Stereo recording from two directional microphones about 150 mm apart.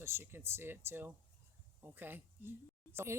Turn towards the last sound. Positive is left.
turn(degrees=-15)  # may be behind; listen again after turning